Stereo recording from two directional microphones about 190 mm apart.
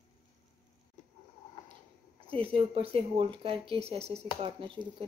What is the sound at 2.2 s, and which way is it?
Speech, 30° right (ahead or behind).